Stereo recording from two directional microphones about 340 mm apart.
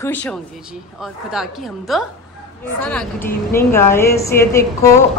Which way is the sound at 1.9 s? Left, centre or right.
Centre.